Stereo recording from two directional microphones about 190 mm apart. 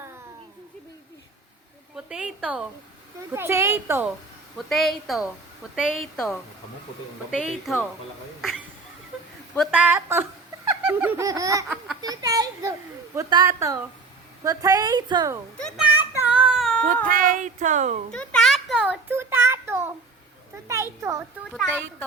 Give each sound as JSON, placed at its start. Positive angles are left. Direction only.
{"t": 2.0, "sound": "a woman's voice", "side_deg": -5}
{"t": 4.5, "sound": "a woman's voice", "side_deg": 0}
{"t": 8.4, "sound": "duck", "side_deg": 0}
{"t": 9.6, "sound": "a woman's voice", "side_deg": -5}
{"t": 10.8, "sound": "baby laughter", "side_deg": -10}
{"t": 12.0, "sound": "a woman's voice", "side_deg": -20}
{"t": 15.6, "sound": "child singing", "side_deg": -5}
{"t": 17.1, "sound": "speech", "side_deg": -45}
{"t": 18.1, "sound": "a sound", "side_deg": 5}
{"t": 20.7, "sound": "a woman's voice", "side_deg": -15}
{"t": 21.5, "sound": "a woman's voice", "side_deg": 0}